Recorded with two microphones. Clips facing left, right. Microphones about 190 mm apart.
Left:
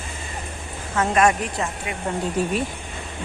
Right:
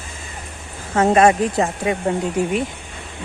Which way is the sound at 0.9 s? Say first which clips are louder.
Right 5 dB; 30° right (ahead or behind).